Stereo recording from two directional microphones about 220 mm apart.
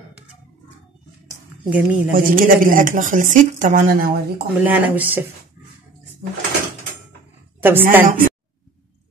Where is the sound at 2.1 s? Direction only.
40° right (ahead or behind).